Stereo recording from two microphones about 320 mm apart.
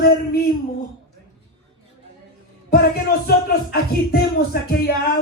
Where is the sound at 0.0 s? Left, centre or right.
Left.